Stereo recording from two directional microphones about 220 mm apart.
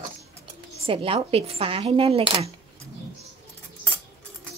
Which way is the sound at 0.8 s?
25° right (ahead or behind).